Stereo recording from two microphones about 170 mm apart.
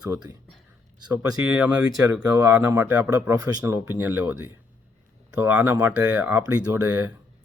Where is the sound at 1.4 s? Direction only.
5° right (ahead or behind).